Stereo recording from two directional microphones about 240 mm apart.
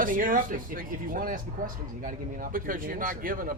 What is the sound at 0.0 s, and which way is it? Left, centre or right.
Speech, right.